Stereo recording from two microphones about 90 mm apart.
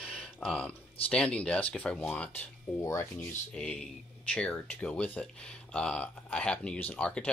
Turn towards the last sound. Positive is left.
turn(degrees=15)  # may be behind; listen again after turning